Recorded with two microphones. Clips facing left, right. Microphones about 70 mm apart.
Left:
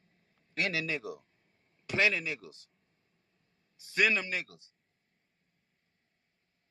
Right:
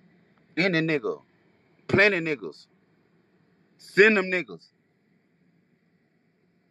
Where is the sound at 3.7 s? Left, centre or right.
Right.